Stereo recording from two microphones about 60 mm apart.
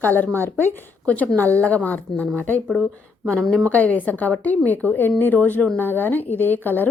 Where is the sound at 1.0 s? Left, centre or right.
Left.